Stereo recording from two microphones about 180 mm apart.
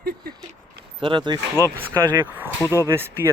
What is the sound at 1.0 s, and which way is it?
Speech, 25° right (ahead or behind).